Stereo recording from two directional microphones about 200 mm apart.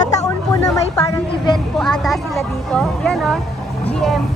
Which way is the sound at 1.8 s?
Centre (ahead or behind).